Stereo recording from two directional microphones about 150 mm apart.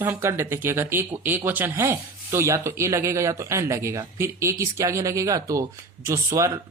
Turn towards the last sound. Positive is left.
turn(degrees=-20)  # may be behind; listen again after turning